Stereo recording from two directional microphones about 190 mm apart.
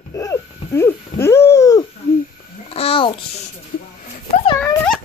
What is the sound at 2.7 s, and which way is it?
Babbling, 30° left (ahead or behind).